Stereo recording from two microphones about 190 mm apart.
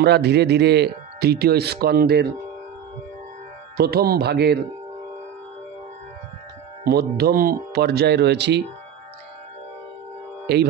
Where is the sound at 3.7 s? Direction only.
55° right (ahead or behind).